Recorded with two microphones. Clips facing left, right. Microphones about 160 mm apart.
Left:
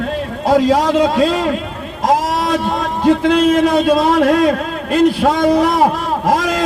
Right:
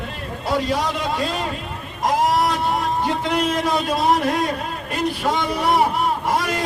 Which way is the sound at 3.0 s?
90° left.